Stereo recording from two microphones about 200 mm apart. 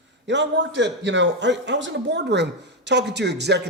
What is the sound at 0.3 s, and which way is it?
A man's voice, 65° right (ahead or behind).